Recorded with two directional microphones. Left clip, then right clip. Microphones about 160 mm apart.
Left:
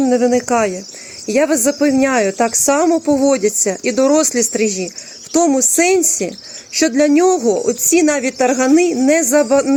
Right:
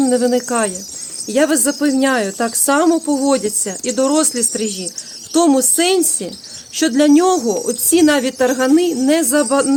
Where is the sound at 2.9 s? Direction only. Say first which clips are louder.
Left 2 dB; 25° left (ahead or behind).